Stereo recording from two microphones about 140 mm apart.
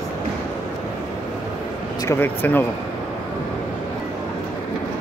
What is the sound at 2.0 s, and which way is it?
Speech, 20° left (ahead or behind).